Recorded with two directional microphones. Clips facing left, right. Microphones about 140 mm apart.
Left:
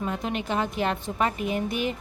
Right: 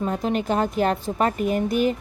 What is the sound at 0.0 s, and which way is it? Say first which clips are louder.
A woman's voice: right 5 dB; 35° right (ahead or behind).